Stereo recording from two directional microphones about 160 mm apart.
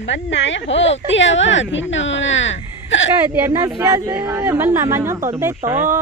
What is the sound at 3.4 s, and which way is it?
A man's voice, 15° right (ahead or behind).